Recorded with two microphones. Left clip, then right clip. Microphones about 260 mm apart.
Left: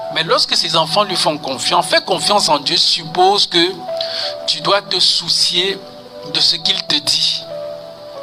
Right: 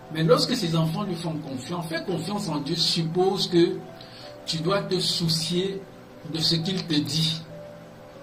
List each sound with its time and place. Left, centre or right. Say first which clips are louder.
0.1 s a man's voice: left 6 dB; left